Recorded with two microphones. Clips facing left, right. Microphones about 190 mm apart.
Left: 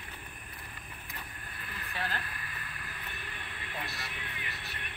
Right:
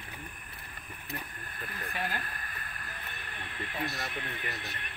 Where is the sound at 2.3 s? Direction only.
45° right (ahead or behind).